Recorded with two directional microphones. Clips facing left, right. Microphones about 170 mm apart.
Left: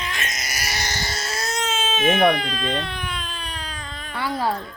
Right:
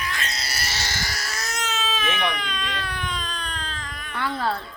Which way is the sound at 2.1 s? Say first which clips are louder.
Left 11 dB; 45° left (ahead or behind).